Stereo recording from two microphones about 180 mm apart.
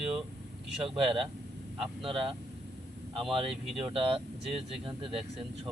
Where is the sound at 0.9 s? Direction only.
30° right (ahead or behind).